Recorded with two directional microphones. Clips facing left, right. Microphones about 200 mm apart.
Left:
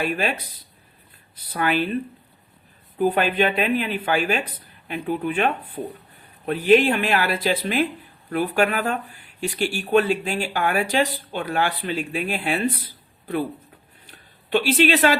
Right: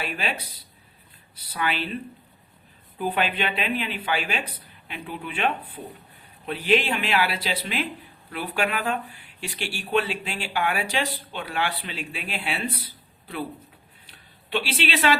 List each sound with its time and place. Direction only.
0.0 s speech: 50° left (ahead or behind)
3.0 s speech: 45° left (ahead or behind)
14.1 s a sound: 45° left (ahead or behind)